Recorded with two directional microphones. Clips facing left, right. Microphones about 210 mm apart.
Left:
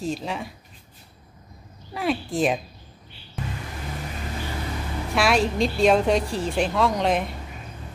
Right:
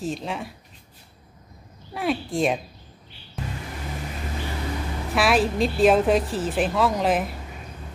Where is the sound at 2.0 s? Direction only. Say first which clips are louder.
Even; centre (ahead or behind).